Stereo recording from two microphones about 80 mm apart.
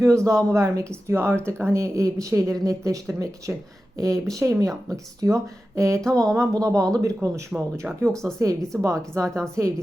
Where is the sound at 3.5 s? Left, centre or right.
Right.